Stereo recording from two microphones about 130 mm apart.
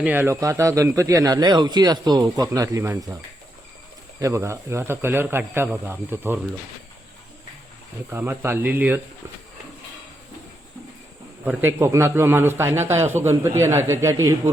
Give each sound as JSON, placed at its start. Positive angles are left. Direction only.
{"t": 0.0, "sound": "speech", "side_deg": -15}
{"t": 4.2, "sound": "a man's voice", "side_deg": -20}
{"t": 8.1, "sound": "a man's voice", "side_deg": -15}
{"t": 11.4, "sound": "speech", "side_deg": -20}